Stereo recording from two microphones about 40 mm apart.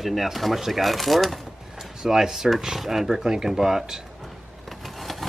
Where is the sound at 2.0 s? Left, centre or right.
Centre.